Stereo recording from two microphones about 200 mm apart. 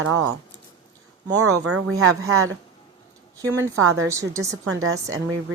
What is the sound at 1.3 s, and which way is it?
Speech, 90° right.